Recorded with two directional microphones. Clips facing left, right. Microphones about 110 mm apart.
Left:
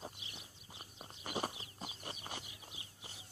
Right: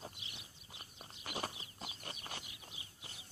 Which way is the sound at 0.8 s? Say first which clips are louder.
Left 2 dB; 25° left (ahead or behind).